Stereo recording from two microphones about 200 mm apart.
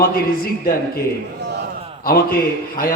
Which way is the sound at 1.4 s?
60° right (ahead or behind).